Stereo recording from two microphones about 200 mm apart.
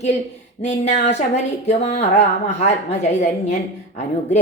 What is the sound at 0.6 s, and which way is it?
A woman's voice, 35° left (ahead or behind).